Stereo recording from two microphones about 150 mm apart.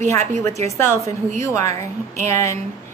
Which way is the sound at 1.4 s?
20° left (ahead or behind).